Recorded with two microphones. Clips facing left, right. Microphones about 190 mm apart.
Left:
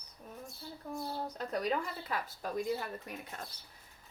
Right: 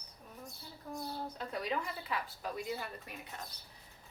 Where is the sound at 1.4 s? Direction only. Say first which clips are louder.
Left 4 dB; 45° left (ahead or behind).